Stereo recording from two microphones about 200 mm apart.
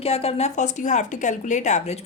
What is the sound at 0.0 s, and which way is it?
A woman's voice, 30° left (ahead or behind).